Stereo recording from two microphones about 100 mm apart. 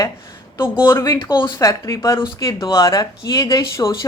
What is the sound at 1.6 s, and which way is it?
Speech, 35° left (ahead or behind).